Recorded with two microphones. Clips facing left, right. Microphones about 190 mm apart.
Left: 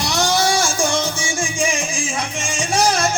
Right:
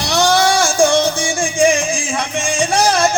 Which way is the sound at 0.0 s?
60° right (ahead or behind).